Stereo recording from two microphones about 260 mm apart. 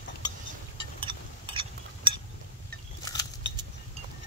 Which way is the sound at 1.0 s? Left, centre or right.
Centre.